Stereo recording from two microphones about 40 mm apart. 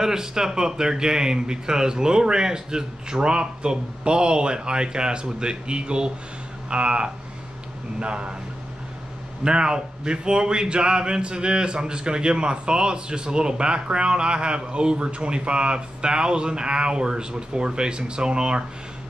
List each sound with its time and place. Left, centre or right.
0.0 s speech: centre
9.4 s speech: right